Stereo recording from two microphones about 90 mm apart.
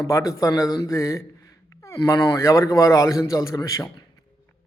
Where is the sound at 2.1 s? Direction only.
40° left (ahead or behind).